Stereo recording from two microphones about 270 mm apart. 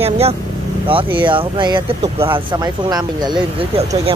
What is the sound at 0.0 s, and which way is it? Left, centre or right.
Speech, right.